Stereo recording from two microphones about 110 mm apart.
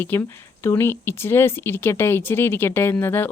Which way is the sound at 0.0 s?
20° left (ahead or behind).